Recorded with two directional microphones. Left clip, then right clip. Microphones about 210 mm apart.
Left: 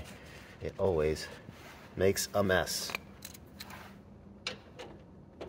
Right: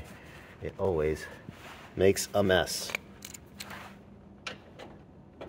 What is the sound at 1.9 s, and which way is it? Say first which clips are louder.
Speech: right 4 dB; 25° right (ahead or behind).